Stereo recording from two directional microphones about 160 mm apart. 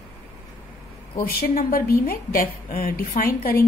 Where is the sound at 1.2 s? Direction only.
70° left (ahead or behind).